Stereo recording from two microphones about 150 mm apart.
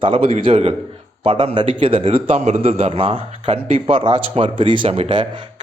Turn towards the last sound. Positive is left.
turn(degrees=-35)  # may be behind; listen again after turning